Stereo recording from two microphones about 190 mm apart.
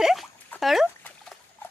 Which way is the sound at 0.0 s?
Centre (ahead or behind).